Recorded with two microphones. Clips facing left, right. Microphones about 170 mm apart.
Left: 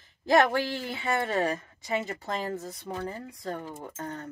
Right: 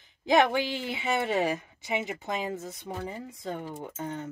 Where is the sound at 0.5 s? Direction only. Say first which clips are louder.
Even; 20° right (ahead or behind).